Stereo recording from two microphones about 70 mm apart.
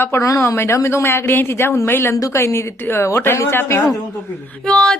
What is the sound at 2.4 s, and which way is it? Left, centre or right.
Speech, left.